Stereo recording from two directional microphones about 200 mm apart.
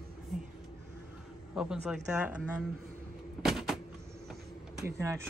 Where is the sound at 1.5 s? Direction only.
5° right (ahead or behind).